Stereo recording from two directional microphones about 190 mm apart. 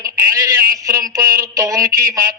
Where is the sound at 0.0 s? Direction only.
15° right (ahead or behind).